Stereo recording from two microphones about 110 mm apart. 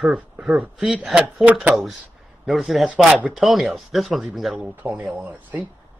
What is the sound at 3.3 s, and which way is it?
Speech, centre (ahead or behind).